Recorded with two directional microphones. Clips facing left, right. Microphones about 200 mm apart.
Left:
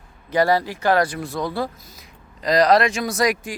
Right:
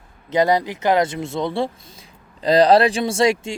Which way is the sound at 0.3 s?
20° right (ahead or behind).